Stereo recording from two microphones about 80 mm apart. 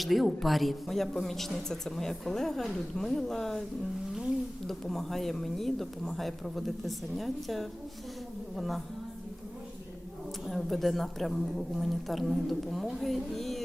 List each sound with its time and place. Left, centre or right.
0.0 s speech: centre
4.6 s speech: centre
10.4 s speech: centre